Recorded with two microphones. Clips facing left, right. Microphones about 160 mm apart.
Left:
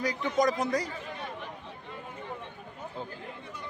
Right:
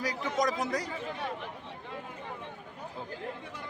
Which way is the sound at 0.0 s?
Centre (ahead or behind).